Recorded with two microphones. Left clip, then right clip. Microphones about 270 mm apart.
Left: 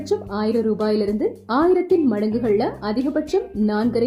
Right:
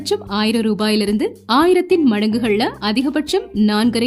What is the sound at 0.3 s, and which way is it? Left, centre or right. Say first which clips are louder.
Speech: right 2 dB; right.